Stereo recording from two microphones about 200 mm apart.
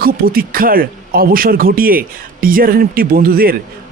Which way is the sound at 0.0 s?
45° right (ahead or behind).